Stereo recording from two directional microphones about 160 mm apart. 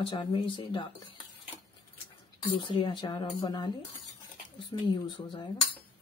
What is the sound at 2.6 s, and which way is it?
Speech, 30° left (ahead or behind).